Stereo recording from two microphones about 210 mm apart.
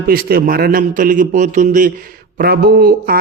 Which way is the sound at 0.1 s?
45° right (ahead or behind).